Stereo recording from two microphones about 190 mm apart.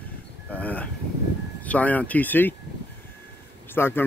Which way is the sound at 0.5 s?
10° left (ahead or behind).